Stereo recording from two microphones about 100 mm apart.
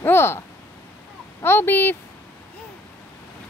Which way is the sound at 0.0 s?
25° left (ahead or behind).